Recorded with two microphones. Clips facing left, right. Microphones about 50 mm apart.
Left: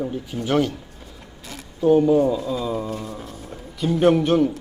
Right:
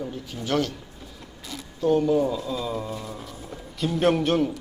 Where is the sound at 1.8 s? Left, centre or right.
Centre.